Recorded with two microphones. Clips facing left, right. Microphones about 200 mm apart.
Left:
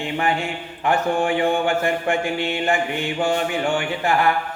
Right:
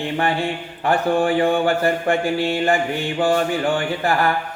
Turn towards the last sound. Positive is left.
turn(degrees=-35)  # may be behind; listen again after turning